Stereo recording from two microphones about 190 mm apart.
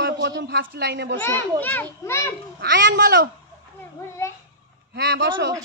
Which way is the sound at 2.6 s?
70° right (ahead or behind).